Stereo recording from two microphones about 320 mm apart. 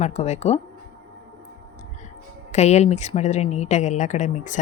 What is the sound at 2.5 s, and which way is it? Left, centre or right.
A woman's voice, left.